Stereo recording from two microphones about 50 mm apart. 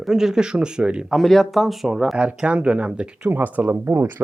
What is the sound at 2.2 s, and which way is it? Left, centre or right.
Speech, right.